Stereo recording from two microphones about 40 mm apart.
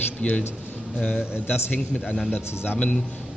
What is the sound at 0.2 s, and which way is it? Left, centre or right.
Speech, left.